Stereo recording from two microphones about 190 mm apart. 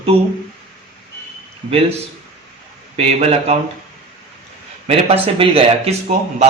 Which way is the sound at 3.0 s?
35° right (ahead or behind).